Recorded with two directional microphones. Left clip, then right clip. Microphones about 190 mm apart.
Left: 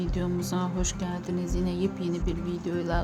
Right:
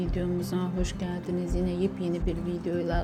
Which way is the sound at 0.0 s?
10° left (ahead or behind).